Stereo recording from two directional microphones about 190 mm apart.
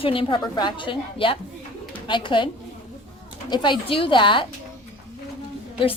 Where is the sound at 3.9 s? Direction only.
25° left (ahead or behind).